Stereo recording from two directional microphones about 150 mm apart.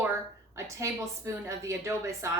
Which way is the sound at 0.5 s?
20° right (ahead or behind).